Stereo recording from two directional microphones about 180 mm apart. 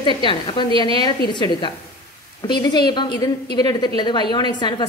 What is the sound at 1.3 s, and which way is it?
A woman's voice, 25° left (ahead or behind).